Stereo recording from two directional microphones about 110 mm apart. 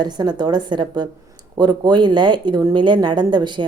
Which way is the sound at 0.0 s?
40° right (ahead or behind).